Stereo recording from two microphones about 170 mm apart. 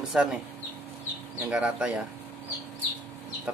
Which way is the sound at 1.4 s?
5° right (ahead or behind).